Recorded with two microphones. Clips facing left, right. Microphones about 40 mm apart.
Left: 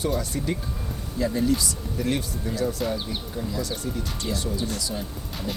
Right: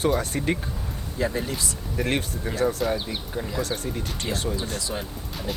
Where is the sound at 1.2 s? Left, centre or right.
Right.